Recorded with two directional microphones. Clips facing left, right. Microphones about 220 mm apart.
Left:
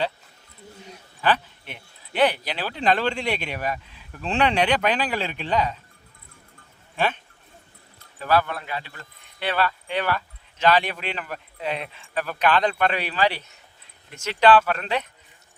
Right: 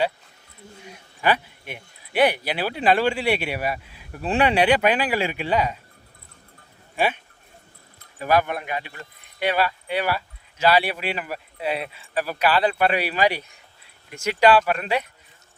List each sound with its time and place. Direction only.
0.9 s speech: 10° right (ahead or behind)
6.9 s speech: 10° right (ahead or behind)
8.2 s speech: 15° right (ahead or behind)